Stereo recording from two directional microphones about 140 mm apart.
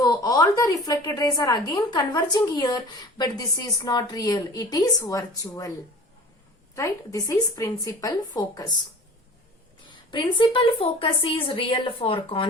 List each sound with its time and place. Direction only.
0.0 s a woman's voice: 25° left (ahead or behind)
6.7 s a woman's voice: 25° left (ahead or behind)
9.8 s a woman's voice: 35° left (ahead or behind)